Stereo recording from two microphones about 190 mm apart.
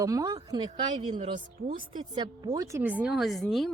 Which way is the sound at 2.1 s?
25° right (ahead or behind).